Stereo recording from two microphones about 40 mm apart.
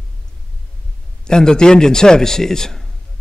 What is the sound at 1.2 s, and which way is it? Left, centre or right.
A man's voice, centre.